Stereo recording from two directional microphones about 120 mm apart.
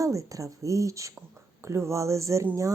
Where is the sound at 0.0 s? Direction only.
25° right (ahead or behind).